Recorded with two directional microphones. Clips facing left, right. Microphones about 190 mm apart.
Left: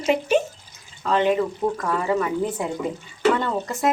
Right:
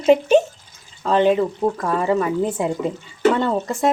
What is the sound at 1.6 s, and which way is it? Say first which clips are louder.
Speech: right 3 dB; 30° right (ahead or behind).